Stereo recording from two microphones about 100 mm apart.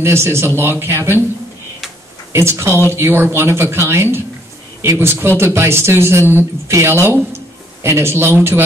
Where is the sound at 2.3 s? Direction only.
25° right (ahead or behind).